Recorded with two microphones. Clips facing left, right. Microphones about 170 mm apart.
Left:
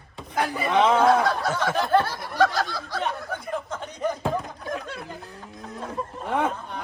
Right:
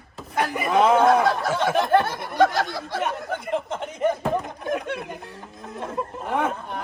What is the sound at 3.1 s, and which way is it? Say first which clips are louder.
Chatter: right 3 dB; 20° right (ahead or behind).